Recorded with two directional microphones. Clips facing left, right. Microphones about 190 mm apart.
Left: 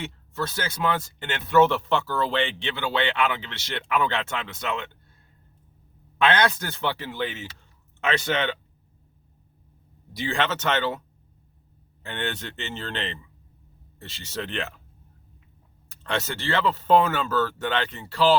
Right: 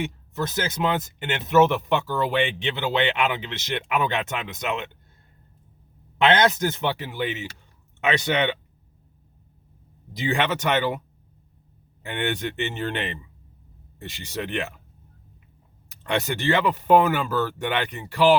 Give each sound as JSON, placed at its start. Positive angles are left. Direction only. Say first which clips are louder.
{"t": 0.0, "sound": "speech", "louder": "right 3 dB", "side_deg": -20}
{"t": 6.1, "sound": "speech", "louder": "right 3 dB", "side_deg": -20}
{"t": 10.2, "sound": "speech", "louder": "right 2 dB", "side_deg": -15}
{"t": 12.0, "sound": "speech", "louder": "right 4 dB", "side_deg": -15}
{"t": 15.9, "sound": "speech", "louder": "right 3 dB", "side_deg": -15}